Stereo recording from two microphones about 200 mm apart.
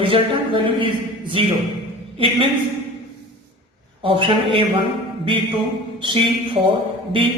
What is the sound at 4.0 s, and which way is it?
Speech, 25° right (ahead or behind).